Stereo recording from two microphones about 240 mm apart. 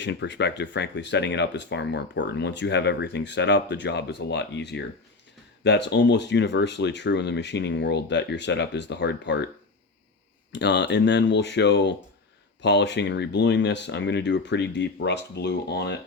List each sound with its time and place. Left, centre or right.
0.0 s speech: left
10.5 s speech: left